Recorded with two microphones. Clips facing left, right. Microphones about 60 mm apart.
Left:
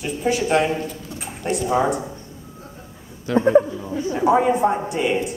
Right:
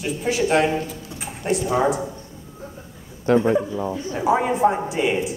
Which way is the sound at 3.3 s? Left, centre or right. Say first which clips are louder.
Right 3 dB; right.